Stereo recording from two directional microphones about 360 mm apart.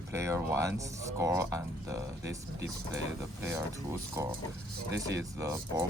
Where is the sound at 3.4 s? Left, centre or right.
Centre.